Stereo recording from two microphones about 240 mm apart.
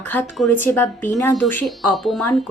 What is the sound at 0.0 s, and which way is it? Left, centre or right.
Speech, centre.